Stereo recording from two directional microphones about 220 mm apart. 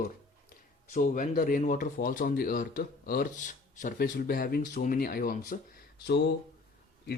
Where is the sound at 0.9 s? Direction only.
35° left (ahead or behind).